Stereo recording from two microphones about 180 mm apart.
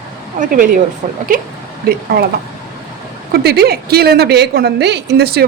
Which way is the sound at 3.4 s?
60° right (ahead or behind).